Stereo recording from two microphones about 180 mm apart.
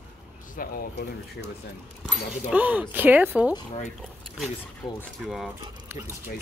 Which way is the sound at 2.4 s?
10° right (ahead or behind).